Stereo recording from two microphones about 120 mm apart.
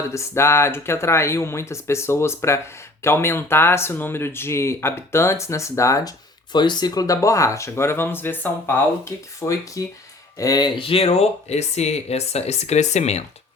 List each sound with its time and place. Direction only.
0.1 s speech: 25° left (ahead or behind)
6.5 s speech: 40° left (ahead or behind)
10.8 s speech: 55° left (ahead or behind)